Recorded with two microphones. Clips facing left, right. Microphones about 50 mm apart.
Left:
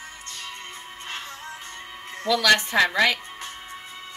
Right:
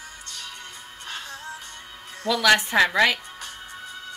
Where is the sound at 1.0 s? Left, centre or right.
Left.